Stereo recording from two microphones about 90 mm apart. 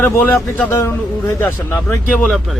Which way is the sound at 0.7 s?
30° left (ahead or behind).